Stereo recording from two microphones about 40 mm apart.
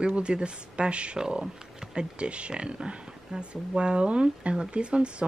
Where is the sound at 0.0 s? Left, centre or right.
Right.